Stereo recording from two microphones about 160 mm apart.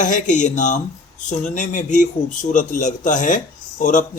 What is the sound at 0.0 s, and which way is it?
Speech, 50° left (ahead or behind).